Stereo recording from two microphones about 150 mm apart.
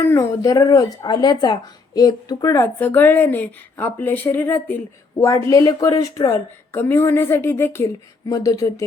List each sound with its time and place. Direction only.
0.0 s speech: 15° left (ahead or behind)